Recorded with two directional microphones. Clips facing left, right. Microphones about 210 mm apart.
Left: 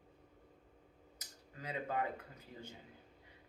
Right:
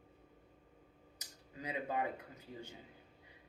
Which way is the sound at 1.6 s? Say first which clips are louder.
Right 1 dB; 15° right (ahead or behind).